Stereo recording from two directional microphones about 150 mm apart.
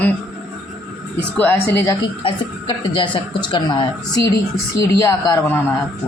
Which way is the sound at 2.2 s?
35° left (ahead or behind).